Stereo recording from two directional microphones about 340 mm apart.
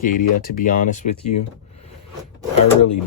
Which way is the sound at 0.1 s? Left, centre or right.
Left.